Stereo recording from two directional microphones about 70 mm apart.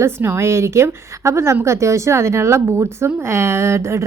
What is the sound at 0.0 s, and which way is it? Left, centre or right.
Speech, right.